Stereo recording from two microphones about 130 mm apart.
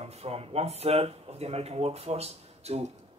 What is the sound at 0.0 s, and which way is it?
Speech, 50° right (ahead or behind).